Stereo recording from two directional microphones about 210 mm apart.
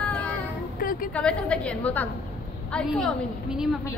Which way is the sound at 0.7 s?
45° left (ahead or behind).